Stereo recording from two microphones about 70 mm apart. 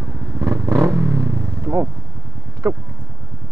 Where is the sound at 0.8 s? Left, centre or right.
Right.